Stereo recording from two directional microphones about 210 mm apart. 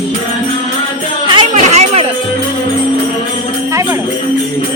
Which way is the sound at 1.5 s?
30° right (ahead or behind).